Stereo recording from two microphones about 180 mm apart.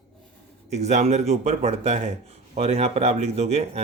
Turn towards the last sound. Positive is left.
turn(degrees=-35)  # may be behind; listen again after turning